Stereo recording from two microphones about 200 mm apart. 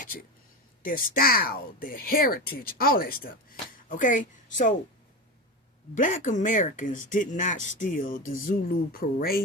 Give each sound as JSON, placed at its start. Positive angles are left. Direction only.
{"t": 0.8, "sound": "a woman's voice", "side_deg": 45}
{"t": 5.9, "sound": "speech", "side_deg": 40}